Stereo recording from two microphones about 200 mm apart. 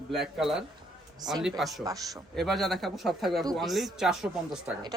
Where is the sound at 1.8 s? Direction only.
15° right (ahead or behind).